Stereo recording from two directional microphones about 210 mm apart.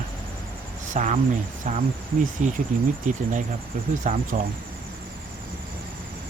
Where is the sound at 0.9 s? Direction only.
35° right (ahead or behind).